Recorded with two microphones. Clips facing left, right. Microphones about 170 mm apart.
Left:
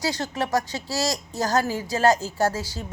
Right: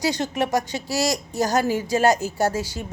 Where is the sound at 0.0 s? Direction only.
20° right (ahead or behind).